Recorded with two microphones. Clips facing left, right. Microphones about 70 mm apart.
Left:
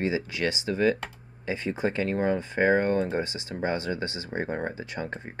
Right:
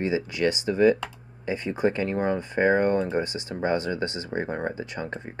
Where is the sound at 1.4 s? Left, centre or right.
Left.